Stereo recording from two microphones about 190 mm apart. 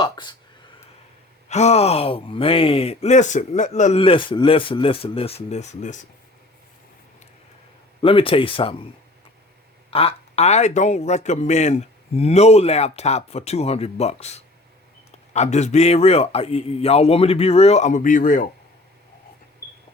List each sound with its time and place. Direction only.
0.0 s speech: 25° left (ahead or behind)
1.5 s speech: 35° left (ahead or behind)
8.0 s speech: 30° left (ahead or behind)
9.9 s speech: 30° left (ahead or behind)